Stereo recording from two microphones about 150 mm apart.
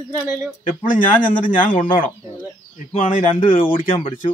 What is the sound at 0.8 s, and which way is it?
A man's voice, 65° left (ahead or behind).